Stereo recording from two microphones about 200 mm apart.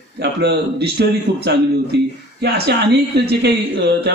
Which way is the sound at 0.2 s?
55° right (ahead or behind).